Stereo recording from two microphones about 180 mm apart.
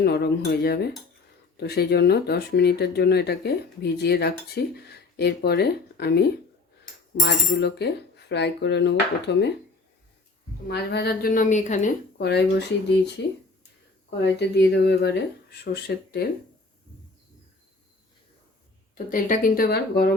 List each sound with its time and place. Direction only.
0.0 s speech: 65° left (ahead or behind)
10.7 s a woman's voice: 65° left (ahead or behind); by 12.2 s 45° left (ahead or behind)
12.2 s speech: 70° left (ahead or behind)
14.3 s speech: 70° left (ahead or behind)
19.1 s a woman's voice: 50° left (ahead or behind)